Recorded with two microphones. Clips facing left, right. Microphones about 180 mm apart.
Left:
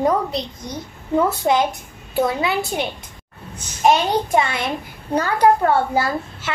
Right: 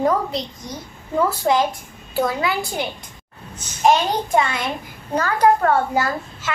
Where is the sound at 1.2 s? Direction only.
20° left (ahead or behind).